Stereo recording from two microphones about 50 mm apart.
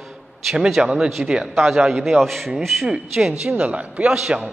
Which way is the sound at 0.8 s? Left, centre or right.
Centre.